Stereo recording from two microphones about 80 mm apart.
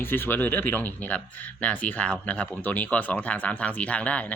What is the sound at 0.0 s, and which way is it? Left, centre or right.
Speech, left.